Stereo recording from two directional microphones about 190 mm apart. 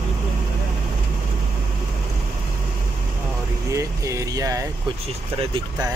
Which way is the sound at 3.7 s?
15° right (ahead or behind).